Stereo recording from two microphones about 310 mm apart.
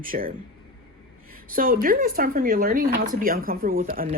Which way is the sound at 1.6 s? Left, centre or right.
Right.